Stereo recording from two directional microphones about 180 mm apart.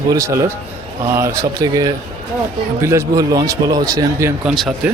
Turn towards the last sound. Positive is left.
turn(degrees=0)  # may be behind; listen again after turning